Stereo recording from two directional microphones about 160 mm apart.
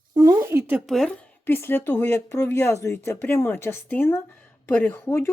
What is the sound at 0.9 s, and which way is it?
Speech, 5° left (ahead or behind).